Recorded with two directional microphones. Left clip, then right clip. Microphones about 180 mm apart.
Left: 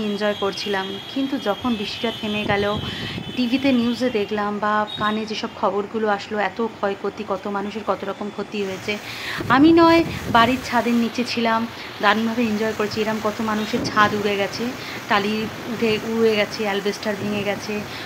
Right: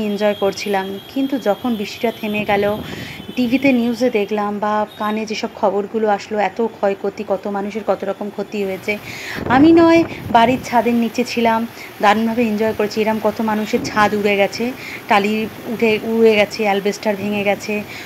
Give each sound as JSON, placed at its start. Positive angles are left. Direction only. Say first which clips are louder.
{"t": 0.0, "sound": "a woman's voice", "louder": "right 5 dB", "side_deg": -20}